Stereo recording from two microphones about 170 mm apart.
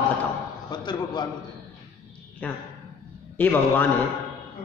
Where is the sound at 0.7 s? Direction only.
25° left (ahead or behind).